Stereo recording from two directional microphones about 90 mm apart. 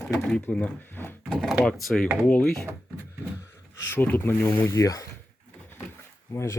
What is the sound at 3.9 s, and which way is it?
Speech, 20° left (ahead or behind).